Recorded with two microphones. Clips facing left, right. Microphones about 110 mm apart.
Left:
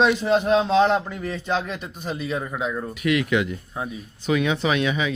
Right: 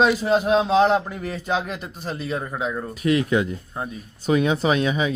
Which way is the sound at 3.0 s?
35° right (ahead or behind).